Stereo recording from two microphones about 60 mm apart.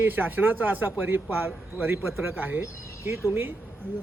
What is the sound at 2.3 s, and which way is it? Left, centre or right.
Speech, right.